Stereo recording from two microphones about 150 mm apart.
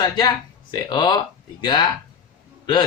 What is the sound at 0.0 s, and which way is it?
Speech, 30° left (ahead or behind).